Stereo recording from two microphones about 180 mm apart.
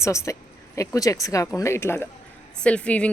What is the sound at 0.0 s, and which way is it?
Speech, 15° left (ahead or behind).